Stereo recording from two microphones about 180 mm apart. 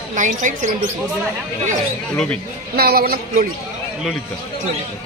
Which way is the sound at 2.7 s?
60° right (ahead or behind).